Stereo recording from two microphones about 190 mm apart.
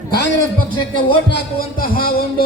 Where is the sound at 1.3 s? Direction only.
55° left (ahead or behind).